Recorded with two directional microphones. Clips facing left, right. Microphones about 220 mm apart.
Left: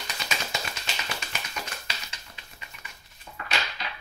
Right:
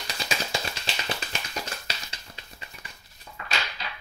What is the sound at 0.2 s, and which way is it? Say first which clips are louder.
Tap: right 3 dB; 30° right (ahead or behind).